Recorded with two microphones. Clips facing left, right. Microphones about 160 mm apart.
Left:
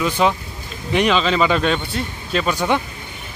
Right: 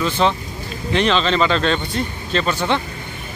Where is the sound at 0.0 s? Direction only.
10° left (ahead or behind).